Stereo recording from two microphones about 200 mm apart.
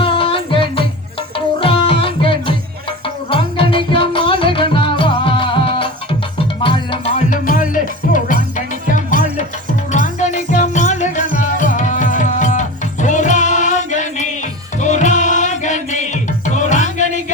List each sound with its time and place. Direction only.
0.0 s music: 25° left (ahead or behind)